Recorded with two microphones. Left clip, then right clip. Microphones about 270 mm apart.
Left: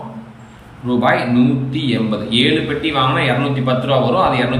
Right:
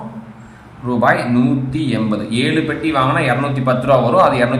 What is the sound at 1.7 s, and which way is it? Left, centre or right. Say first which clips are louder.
Speech: even; centre.